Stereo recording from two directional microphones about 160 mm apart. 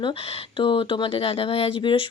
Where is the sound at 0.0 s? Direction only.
35° left (ahead or behind).